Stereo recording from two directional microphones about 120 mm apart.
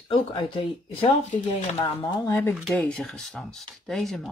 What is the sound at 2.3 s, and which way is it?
Speech, 15° left (ahead or behind).